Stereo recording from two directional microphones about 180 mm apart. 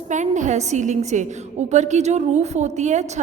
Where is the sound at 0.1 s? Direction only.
40° right (ahead or behind).